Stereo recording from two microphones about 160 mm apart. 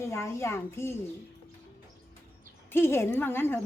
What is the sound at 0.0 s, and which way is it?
Speech, 15° left (ahead or behind).